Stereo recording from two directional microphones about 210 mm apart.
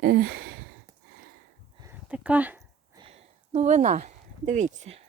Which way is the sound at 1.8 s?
10° right (ahead or behind).